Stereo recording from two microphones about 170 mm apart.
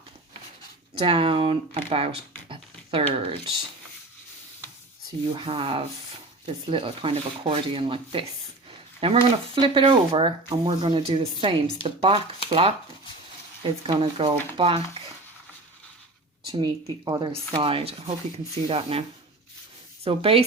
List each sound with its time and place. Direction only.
0.9 s speech: 30° right (ahead or behind)
2.5 s a sound: 35° right (ahead or behind)
5.3 s speech: 30° right (ahead or behind)
11.8 s speech: 35° left (ahead or behind)
12.5 s speech: 30° right (ahead or behind)
13.8 s speech: 35° right (ahead or behind)
16.5 s speech: 20° right (ahead or behind)
20.1 s speech: 35° right (ahead or behind)